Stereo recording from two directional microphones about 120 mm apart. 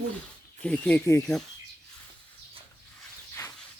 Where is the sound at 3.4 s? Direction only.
20° left (ahead or behind).